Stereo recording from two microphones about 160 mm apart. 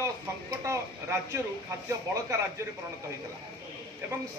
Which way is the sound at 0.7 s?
20° right (ahead or behind).